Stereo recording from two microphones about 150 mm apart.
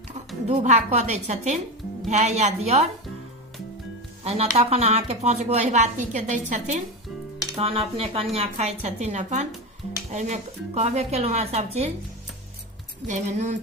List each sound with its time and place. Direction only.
0.4 s a woman's voice: 50° right (ahead or behind)
4.2 s a woman's voice: 45° right (ahead or behind)
7.5 s a woman's voice: 40° right (ahead or behind)
13.1 s a woman's voice: 55° right (ahead or behind)